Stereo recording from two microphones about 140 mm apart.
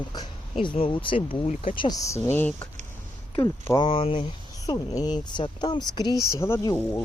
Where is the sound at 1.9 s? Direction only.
20° left (ahead or behind).